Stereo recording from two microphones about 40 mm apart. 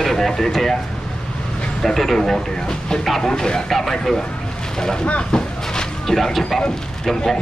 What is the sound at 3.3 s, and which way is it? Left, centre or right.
Speech, centre.